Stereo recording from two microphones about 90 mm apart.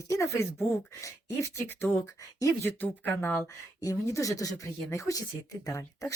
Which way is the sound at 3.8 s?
40° left (ahead or behind).